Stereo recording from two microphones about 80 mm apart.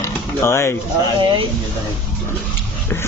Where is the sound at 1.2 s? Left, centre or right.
Right.